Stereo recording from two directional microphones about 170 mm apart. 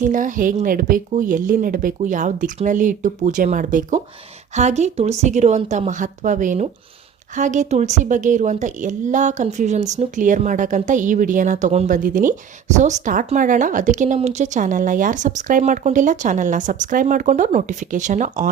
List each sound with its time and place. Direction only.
0.0 s a woman's voice: 50° right (ahead or behind)